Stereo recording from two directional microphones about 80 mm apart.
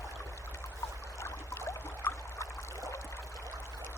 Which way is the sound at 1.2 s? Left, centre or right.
Left.